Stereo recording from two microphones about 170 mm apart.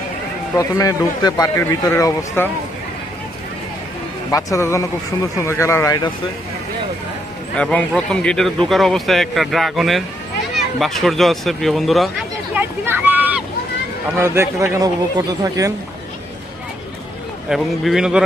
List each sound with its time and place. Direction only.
0.5 s a man's voice: 20° left (ahead or behind)
4.3 s a man's voice: 20° left (ahead or behind)
7.5 s a man's voice: 5° left (ahead or behind)
12.5 s a sound: 10° right (ahead or behind)
14.2 s a man's voice: 15° right (ahead or behind)
17.5 s a man's voice: centre (ahead or behind)